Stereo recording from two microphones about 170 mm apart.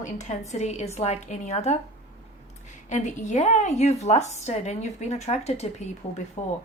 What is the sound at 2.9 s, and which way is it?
A woman's voice, 45° left (ahead or behind).